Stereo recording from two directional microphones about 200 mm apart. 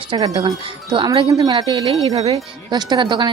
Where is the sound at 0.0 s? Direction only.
25° right (ahead or behind).